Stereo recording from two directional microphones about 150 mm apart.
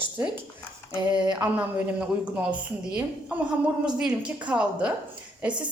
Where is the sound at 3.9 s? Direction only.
5° right (ahead or behind).